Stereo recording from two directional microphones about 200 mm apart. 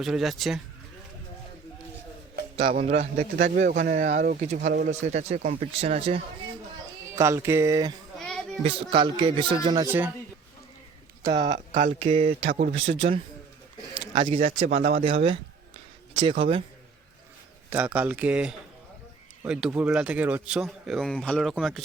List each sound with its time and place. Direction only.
0.0 s speech: centre (ahead or behind)
2.6 s a man's voice: 30° right (ahead or behind)
7.2 s speech: 15° right (ahead or behind)
8.1 s a sound: centre (ahead or behind)
8.6 s a man's voice: 25° right (ahead or behind)
11.2 s speech: 20° right (ahead or behind)
11.4 s speech: 60° right (ahead or behind)
11.8 s a man's voice: 30° right (ahead or behind)
17.7 s speech: 5° right (ahead or behind)